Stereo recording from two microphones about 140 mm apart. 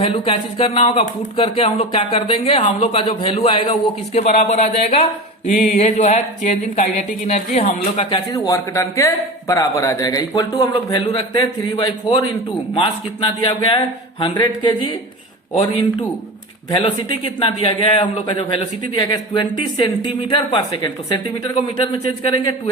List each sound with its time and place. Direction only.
0.0 s speech: 40° left (ahead or behind)
8.3 s a man's voice: 25° left (ahead or behind)
16.8 s a man's voice: 35° left (ahead or behind)